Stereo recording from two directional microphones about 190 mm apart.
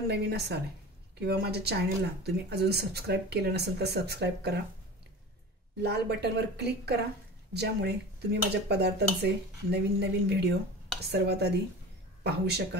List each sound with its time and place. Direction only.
0.1 s speech: 60° right (ahead or behind)
5.8 s a man's voice: 60° right (ahead or behind)